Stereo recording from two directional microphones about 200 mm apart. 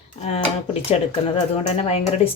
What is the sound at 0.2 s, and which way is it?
A woman's voice, 30° left (ahead or behind).